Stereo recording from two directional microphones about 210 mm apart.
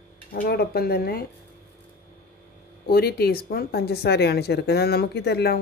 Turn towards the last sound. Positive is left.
turn(degrees=50)  # may be behind; listen again after turning